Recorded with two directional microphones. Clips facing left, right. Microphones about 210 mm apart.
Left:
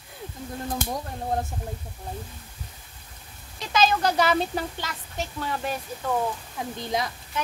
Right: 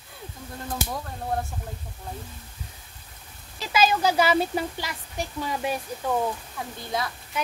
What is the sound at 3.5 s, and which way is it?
Speech, 5° right (ahead or behind).